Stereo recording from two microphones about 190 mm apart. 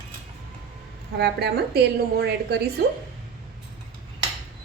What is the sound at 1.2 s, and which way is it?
A woman's voice, 60° right (ahead or behind).